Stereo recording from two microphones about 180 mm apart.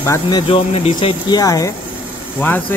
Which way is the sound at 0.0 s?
15° left (ahead or behind).